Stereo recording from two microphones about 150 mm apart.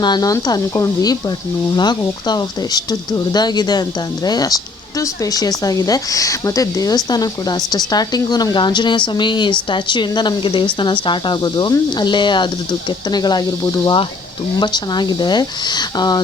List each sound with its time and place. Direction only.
0.0 s speech: 25° left (ahead or behind)